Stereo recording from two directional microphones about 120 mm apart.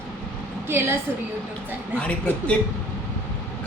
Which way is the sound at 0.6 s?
20° right (ahead or behind).